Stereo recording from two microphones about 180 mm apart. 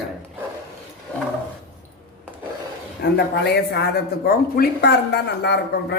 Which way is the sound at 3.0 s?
65° left (ahead or behind).